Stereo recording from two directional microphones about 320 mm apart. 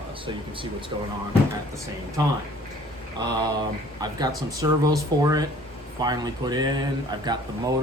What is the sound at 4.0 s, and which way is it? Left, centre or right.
Speech, centre.